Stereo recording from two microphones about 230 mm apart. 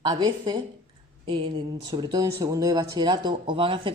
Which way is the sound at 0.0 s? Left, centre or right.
Centre.